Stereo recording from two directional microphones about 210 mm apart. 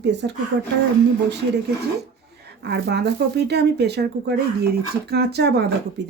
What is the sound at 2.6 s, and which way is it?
Speech, 50° right (ahead or behind).